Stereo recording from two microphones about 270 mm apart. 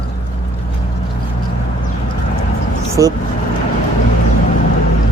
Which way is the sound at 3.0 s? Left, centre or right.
Centre.